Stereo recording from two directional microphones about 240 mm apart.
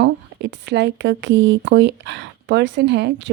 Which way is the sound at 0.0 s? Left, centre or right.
Right.